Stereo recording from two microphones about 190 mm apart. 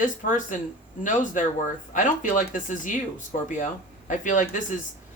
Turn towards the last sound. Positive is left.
turn(degrees=40)  # may be behind; listen again after turning